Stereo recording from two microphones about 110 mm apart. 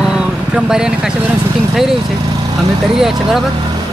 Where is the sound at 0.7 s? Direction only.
5° right (ahead or behind).